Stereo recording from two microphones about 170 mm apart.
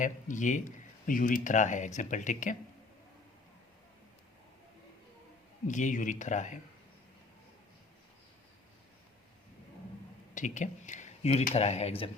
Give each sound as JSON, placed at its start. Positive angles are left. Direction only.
{"t": 0.0, "sound": "speech", "side_deg": 50}
{"t": 5.6, "sound": "speech", "side_deg": 45}
{"t": 10.3, "sound": "speech", "side_deg": 45}